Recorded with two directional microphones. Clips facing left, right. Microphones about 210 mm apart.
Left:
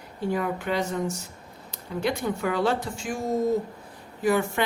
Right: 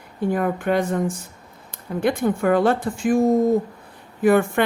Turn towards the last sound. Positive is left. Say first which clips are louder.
# right 7 dB
turn(degrees=-55)  # may be behind; listen again after turning